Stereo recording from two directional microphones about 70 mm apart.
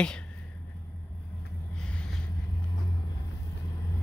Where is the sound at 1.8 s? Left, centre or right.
Centre.